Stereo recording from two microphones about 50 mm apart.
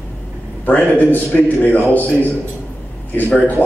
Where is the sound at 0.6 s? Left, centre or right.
Left.